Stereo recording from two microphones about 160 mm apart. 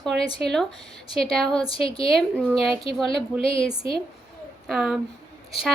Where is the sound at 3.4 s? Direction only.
35° left (ahead or behind).